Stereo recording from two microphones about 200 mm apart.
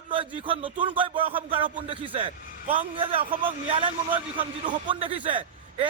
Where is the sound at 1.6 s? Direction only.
40° right (ahead or behind).